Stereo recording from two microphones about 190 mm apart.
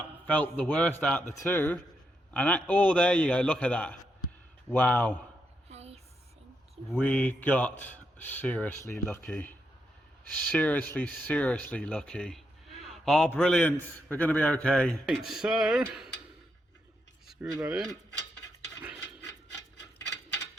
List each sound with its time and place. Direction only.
0.3 s speech: 10° left (ahead or behind)
5.6 s a sound: 35° right (ahead or behind)
7.0 s a man's voice: 5° left (ahead or behind)
17.6 s a man's voice: 5° right (ahead or behind)